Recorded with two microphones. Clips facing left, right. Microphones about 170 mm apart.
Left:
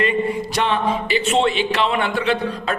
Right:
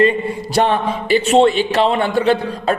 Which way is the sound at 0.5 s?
45° right (ahead or behind).